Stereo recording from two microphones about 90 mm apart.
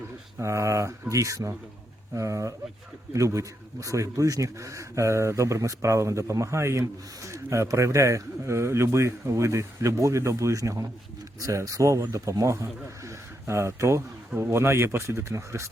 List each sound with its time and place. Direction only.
0.3 s speech: 35° right (ahead or behind)